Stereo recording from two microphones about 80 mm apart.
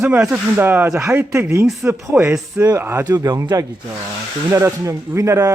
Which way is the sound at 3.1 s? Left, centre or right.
Right.